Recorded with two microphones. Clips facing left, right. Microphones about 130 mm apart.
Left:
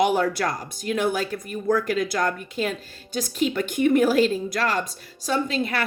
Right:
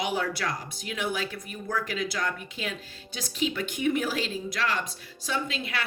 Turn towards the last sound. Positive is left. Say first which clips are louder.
# left 7 dB
turn(degrees=45)  # may be behind; listen again after turning